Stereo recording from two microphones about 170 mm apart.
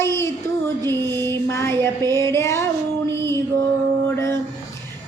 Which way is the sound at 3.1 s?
15° left (ahead or behind).